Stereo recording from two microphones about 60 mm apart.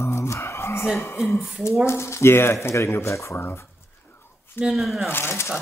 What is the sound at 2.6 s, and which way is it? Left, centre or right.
Speech, left.